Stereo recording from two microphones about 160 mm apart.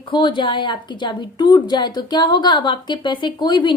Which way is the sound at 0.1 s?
30° left (ahead or behind).